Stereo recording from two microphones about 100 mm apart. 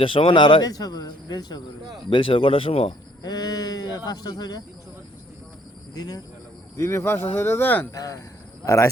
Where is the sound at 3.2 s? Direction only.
40° left (ahead or behind).